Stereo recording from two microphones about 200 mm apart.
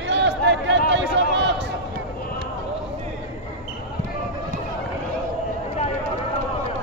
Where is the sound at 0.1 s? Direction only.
65° right (ahead or behind).